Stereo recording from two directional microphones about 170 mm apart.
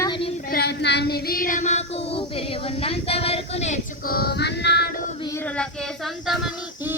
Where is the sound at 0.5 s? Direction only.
75° left (ahead or behind); by 1.8 s 45° left (ahead or behind).